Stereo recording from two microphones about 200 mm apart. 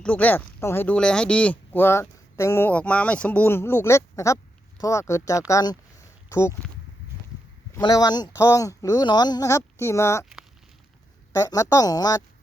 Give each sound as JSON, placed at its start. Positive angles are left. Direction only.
{"t": 0.0, "sound": "speech", "side_deg": 5}
{"t": 7.7, "sound": "speech", "side_deg": 20}
{"t": 11.3, "sound": "speech", "side_deg": 15}